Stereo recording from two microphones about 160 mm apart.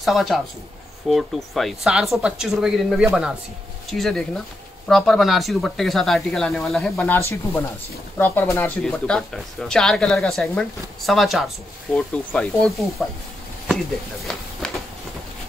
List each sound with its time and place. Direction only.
0.0 s speech: centre (ahead or behind)
7.2 s speech: 15° left (ahead or behind)
14.6 s a sound: 5° left (ahead or behind)